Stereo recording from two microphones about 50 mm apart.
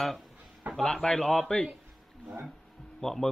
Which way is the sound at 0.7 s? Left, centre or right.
Centre.